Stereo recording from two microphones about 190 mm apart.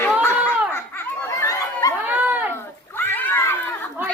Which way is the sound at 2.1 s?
10° right (ahead or behind).